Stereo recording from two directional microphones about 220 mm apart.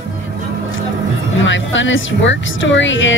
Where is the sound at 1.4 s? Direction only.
55° left (ahead or behind).